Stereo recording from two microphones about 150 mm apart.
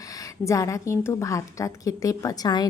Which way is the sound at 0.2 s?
20° left (ahead or behind).